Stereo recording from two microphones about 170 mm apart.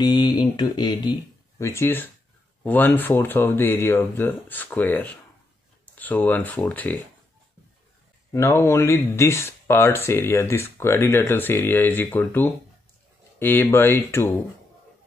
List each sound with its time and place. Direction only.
0.0 s speech: 25° left (ahead or behind); by 7.0 s 10° left (ahead or behind)
8.3 s speech: 15° left (ahead or behind)